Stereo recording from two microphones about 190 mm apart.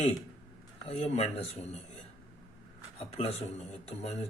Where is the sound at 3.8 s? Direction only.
35° left (ahead or behind).